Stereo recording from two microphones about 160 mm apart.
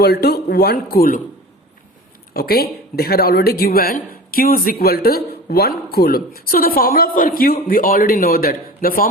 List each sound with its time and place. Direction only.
0.0 s speech: 80° left
2.3 s speech: 75° left (ahead or behind)